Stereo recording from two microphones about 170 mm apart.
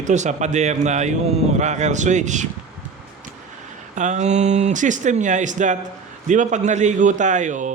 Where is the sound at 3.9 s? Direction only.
45° right (ahead or behind).